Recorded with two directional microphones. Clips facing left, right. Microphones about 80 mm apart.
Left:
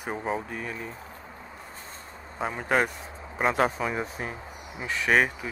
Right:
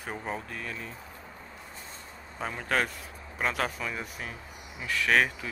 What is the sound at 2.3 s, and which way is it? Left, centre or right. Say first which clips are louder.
Speech: left 4 dB; centre.